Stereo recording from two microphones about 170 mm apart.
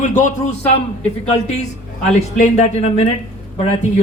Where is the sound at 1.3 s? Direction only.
40° left (ahead or behind).